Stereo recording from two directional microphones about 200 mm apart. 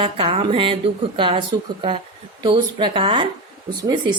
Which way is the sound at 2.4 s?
25° right (ahead or behind).